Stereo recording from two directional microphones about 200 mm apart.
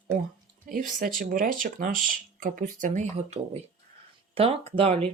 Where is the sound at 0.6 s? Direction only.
45° right (ahead or behind); by 5.1 s 30° right (ahead or behind).